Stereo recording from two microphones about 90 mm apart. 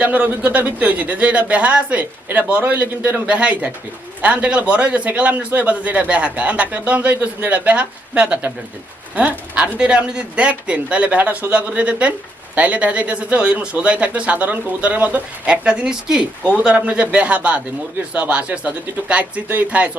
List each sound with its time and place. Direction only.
0.0 s speech: 15° right (ahead or behind)
9.6 s speech: 10° right (ahead or behind)